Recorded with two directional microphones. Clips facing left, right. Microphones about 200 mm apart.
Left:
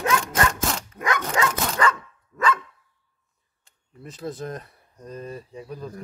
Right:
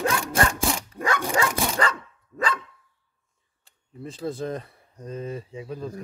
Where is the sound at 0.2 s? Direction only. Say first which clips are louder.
Even; 10° right (ahead or behind).